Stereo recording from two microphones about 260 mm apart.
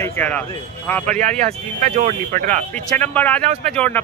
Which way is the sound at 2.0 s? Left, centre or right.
Right.